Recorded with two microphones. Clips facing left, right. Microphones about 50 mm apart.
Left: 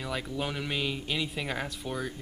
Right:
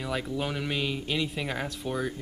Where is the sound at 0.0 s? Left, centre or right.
Centre.